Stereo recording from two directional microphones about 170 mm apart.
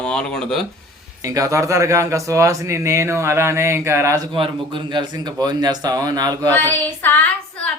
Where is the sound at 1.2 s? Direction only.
20° right (ahead or behind).